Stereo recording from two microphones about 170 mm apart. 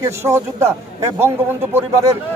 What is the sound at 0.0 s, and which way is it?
A man's voice, 15° right (ahead or behind).